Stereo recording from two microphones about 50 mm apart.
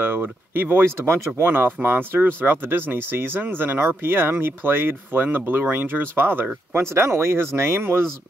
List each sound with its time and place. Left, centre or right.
0.0 s speech: right
0.9 s speech: right
6.7 s speech: right